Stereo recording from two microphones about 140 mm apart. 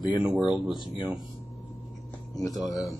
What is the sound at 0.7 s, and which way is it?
Speech, 35° left (ahead or behind).